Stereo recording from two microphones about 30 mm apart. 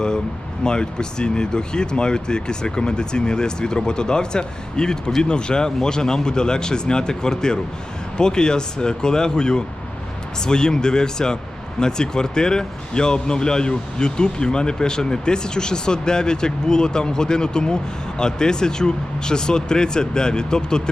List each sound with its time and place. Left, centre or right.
0.6 s speech: left